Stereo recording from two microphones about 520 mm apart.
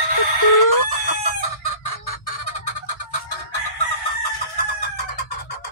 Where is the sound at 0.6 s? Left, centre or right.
Left.